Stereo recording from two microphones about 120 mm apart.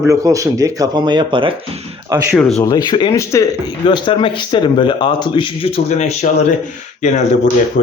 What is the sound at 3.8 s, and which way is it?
Speech, 40° left (ahead or behind).